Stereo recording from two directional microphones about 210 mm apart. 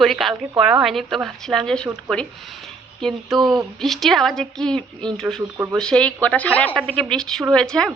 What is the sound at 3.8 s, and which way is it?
A woman's voice, centre (ahead or behind).